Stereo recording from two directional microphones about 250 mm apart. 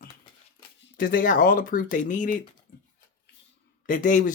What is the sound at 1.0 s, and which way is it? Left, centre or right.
Speech, left.